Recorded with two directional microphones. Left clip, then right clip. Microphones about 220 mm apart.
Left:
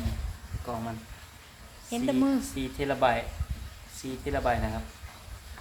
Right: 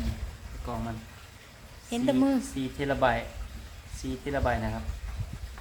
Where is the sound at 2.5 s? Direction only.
Centre (ahead or behind).